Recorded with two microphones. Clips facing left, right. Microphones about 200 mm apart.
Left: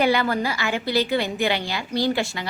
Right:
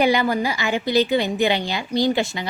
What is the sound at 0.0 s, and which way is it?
A woman's voice, 15° right (ahead or behind).